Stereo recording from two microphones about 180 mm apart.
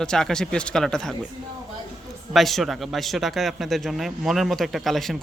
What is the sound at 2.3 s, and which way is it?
Speech, centre (ahead or behind).